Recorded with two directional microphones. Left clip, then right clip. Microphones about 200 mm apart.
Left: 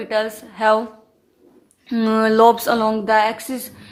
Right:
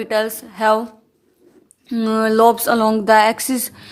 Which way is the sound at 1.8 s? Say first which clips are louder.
Even; 15° right (ahead or behind).